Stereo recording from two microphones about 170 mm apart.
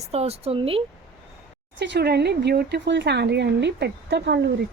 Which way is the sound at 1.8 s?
80° right.